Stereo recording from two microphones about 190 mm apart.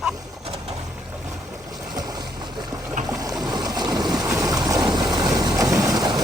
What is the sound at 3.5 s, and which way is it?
Boat, 20° right (ahead or behind).